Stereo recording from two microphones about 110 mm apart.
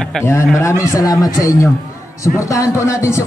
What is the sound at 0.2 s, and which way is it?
A man's voice, 25° left (ahead or behind).